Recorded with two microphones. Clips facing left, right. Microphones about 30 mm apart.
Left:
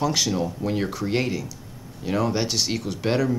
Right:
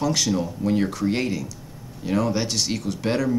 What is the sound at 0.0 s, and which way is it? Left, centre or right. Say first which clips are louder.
Speech: even; centre.